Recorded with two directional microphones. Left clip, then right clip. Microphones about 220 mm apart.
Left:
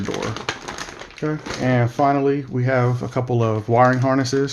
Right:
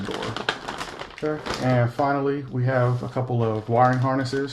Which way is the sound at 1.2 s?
45° left (ahead or behind).